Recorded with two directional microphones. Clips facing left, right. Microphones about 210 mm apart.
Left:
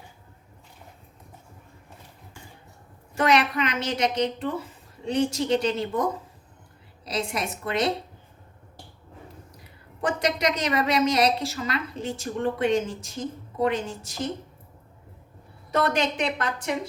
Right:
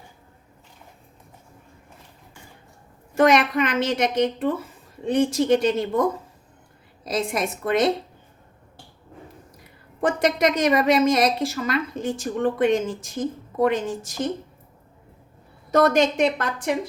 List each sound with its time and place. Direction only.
3.2 s a woman's voice: 50° right (ahead or behind)
7.0 s a woman's voice: 50° right (ahead or behind)
10.2 s a woman's voice: 50° right (ahead or behind)
15.7 s a woman's voice: 45° right (ahead or behind)